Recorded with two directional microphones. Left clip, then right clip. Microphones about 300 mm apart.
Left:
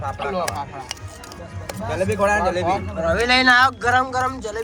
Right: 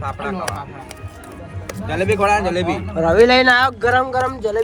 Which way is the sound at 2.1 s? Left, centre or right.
Right.